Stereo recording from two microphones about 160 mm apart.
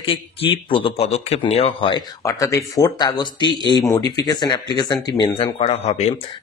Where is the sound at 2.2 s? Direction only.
20° left (ahead or behind); by 6.1 s 40° left (ahead or behind).